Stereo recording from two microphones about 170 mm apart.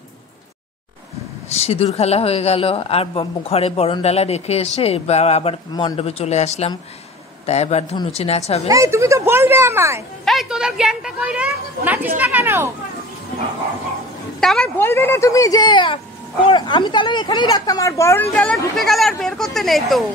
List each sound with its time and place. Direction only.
1.5 s a woman's voice: 35° left (ahead or behind)
8.6 s speech: 15° right (ahead or behind)
10.2 s a woman's voice: centre (ahead or behind)
14.4 s a woman's voice: centre (ahead or behind)
14.8 s speech: 15° left (ahead or behind)
18.3 s a woman's voice: 5° left (ahead or behind)